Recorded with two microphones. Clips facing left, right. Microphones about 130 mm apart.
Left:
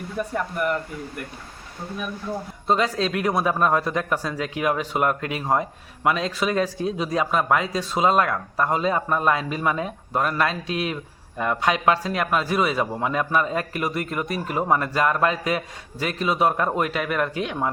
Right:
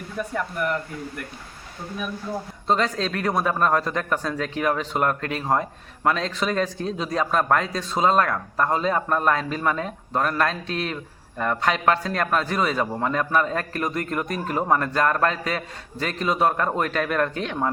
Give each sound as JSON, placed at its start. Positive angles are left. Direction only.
{"t": 0.2, "sound": "speech", "side_deg": 10}
{"t": 2.6, "sound": "speech", "side_deg": 10}